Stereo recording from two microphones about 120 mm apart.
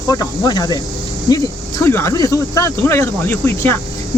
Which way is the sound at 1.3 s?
30° left (ahead or behind).